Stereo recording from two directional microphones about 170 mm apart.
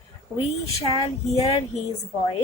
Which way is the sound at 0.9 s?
40° left (ahead or behind).